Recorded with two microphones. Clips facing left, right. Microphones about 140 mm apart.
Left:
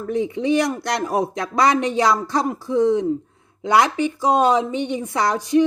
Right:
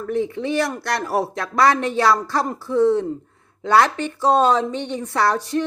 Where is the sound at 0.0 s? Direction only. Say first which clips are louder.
Left 1 dB; 15° left (ahead or behind).